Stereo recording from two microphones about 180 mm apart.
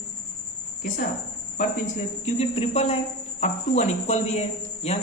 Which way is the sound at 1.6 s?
45° left (ahead or behind).